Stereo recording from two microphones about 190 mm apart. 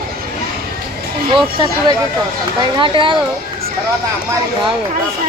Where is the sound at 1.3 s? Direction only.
25° right (ahead or behind).